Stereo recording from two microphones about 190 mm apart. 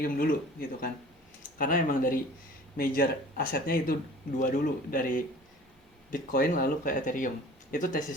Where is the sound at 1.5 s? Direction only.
45° left (ahead or behind).